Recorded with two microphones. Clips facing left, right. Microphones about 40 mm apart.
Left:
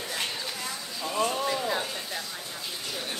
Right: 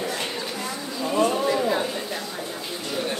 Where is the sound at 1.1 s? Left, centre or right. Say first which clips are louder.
Right 6 dB; right.